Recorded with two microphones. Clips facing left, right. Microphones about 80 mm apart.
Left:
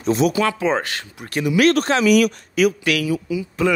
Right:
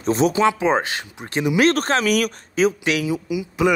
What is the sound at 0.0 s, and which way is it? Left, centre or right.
Speech, right.